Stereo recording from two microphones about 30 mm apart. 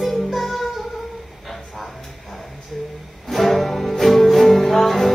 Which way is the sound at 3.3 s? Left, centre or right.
Centre.